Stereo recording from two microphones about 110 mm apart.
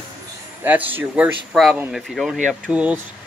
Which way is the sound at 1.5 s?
Centre (ahead or behind).